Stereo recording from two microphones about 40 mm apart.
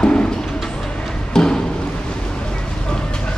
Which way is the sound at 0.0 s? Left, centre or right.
Left.